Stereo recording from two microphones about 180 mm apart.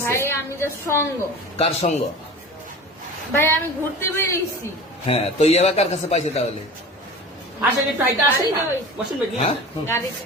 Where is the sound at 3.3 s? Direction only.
15° left (ahead or behind).